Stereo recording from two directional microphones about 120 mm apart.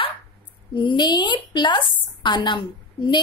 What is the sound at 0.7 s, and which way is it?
A woman's voice, 40° left (ahead or behind).